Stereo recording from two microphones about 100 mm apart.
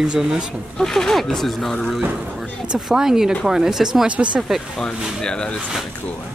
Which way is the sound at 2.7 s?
5° right (ahead or behind).